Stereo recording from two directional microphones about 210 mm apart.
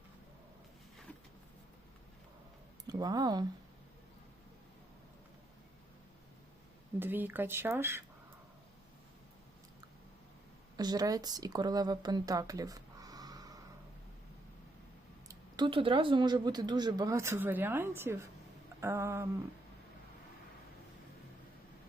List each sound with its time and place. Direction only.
2.8 s speech: 20° right (ahead or behind)
7.0 s speech: 10° right (ahead or behind)
10.8 s speech: 20° right (ahead or behind)
15.3 s speech: 20° right (ahead or behind)